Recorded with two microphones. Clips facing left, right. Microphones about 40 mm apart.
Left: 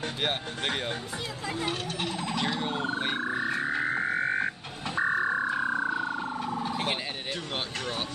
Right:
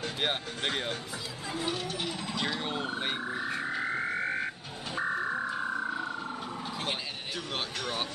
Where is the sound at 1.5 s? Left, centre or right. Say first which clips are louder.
Even; left.